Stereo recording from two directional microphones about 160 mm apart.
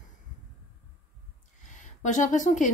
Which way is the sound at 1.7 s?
50° left (ahead or behind).